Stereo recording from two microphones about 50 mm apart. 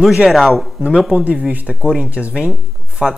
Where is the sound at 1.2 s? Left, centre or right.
Right.